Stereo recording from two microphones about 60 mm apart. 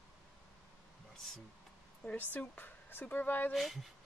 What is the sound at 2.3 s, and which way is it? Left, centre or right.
Speech, left.